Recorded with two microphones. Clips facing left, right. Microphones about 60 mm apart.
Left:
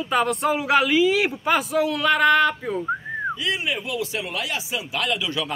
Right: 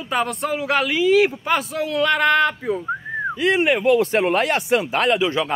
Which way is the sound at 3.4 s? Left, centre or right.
Right.